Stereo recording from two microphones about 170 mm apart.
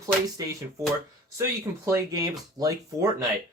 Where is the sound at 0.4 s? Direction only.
20° right (ahead or behind).